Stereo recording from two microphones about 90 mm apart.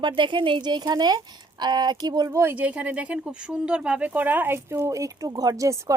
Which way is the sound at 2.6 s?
15° right (ahead or behind).